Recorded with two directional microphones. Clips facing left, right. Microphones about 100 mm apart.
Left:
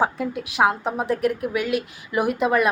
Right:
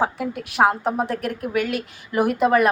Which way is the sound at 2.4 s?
Centre (ahead or behind).